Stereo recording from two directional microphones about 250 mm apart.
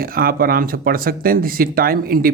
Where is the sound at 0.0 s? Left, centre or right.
Right.